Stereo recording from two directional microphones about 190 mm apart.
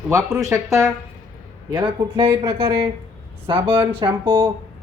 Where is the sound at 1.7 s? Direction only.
25° right (ahead or behind).